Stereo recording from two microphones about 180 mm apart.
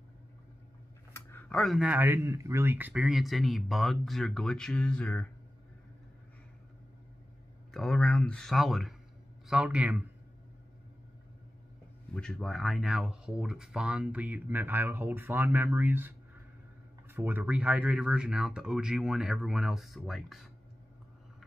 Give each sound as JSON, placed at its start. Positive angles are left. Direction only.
{"t": 1.1, "sound": "a sound", "side_deg": 15}
{"t": 1.6, "sound": "speech", "side_deg": 0}
{"t": 7.7, "sound": "speech", "side_deg": 5}
{"t": 12.1, "sound": "speech", "side_deg": 5}